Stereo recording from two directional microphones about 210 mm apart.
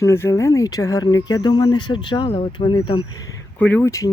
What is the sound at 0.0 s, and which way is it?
Speech, 15° left (ahead or behind).